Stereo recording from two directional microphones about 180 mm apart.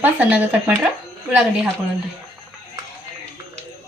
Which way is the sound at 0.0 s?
10° right (ahead or behind).